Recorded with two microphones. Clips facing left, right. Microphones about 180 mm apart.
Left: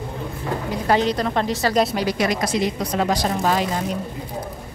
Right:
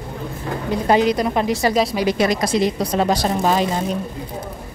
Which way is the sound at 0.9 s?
10° right (ahead or behind).